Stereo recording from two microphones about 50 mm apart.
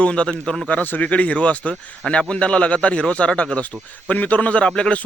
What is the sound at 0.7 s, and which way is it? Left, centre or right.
Speech, left.